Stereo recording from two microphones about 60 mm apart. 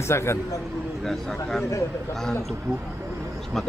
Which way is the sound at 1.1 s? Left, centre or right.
Centre.